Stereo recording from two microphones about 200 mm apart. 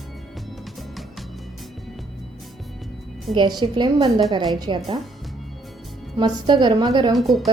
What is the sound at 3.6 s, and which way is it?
A woman's voice, 20° right (ahead or behind).